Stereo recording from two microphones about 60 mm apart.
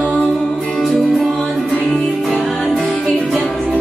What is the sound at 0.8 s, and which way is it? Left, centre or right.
Music, centre.